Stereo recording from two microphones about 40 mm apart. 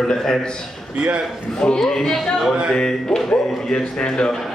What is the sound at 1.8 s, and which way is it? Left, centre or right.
Speech, centre.